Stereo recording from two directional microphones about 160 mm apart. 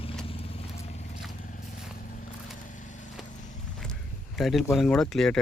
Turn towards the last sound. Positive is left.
turn(degrees=5)  # may be behind; listen again after turning